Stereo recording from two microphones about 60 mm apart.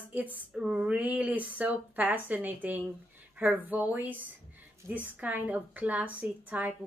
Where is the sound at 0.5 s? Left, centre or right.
Centre.